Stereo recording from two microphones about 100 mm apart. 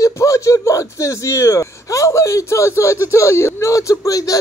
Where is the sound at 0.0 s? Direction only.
30° left (ahead or behind).